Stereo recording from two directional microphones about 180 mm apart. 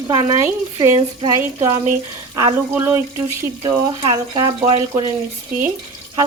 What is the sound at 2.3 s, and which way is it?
Speech, 20° right (ahead or behind).